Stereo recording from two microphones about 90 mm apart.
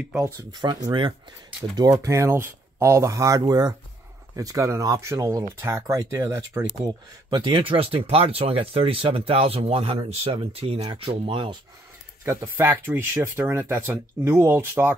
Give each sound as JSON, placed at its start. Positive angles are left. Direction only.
{"t": 0.2, "sound": "speech", "side_deg": -50}
{"t": 2.0, "sound": "speech", "side_deg": -35}
{"t": 7.2, "sound": "speech", "side_deg": -60}
{"t": 12.8, "sound": "speech", "side_deg": -25}